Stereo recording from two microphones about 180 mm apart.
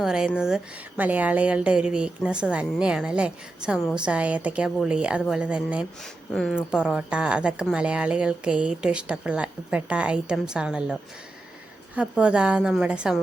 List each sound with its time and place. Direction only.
0.0 s a woman's voice: centre (ahead or behind)
11.9 s a woman's voice: 5° right (ahead or behind)